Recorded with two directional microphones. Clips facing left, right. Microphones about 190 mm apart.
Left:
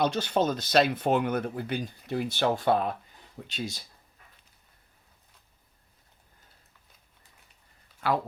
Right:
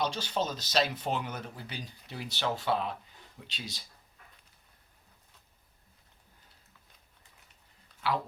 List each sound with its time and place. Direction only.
0.0 s speech: 55° left (ahead or behind)
8.0 s speech: 50° left (ahead or behind)